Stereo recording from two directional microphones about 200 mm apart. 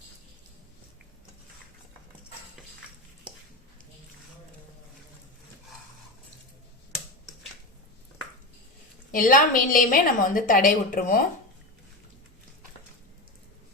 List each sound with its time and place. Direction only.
9.1 s a woman's voice: 45° left (ahead or behind)